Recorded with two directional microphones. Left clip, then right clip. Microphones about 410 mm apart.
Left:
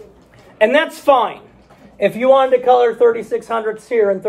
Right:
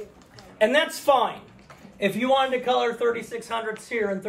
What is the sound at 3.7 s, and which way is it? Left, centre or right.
Speech, left.